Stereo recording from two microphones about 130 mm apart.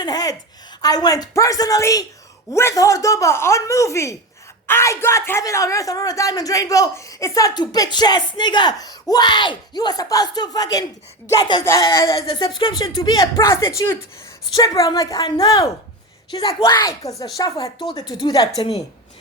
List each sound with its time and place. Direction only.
0.0 s a sound: 30° left (ahead or behind)
0.8 s a man's voice: 30° left (ahead or behind)
11.6 s a man's voice: 20° left (ahead or behind)
11.9 s a man's voice: 40° left (ahead or behind)